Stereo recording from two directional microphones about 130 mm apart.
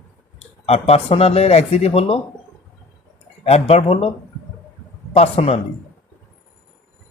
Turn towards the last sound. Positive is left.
turn(degrees=50)  # may be behind; listen again after turning